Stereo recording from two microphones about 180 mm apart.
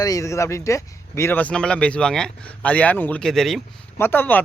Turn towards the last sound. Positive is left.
turn(degrees=10)  # may be behind; listen again after turning